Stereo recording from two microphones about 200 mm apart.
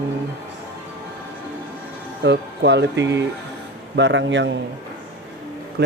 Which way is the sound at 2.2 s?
60° right (ahead or behind).